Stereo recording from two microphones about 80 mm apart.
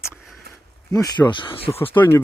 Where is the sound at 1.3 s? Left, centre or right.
Left.